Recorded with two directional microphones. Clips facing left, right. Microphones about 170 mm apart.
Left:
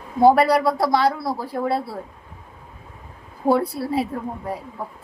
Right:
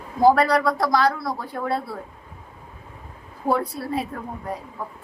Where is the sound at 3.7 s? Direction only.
30° left (ahead or behind).